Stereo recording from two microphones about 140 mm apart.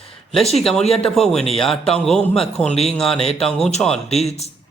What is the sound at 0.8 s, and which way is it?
Speech, 45° left (ahead or behind).